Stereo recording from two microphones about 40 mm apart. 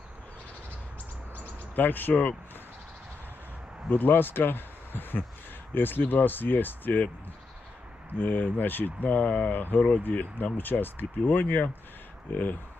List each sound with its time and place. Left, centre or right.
1.7 s speech: left
3.9 s speech: left
8.2 s speech: left